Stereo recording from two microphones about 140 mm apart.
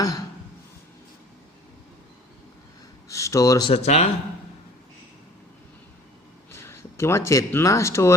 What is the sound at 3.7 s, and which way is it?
Speech, 50° left (ahead or behind).